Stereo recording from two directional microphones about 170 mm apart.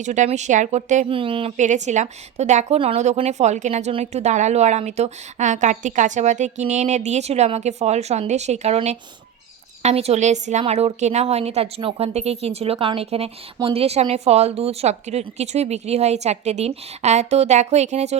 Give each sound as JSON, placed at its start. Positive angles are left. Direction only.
{"t": 0.0, "sound": "speech", "side_deg": -45}
{"t": 1.1, "sound": "a woman's voice", "side_deg": -30}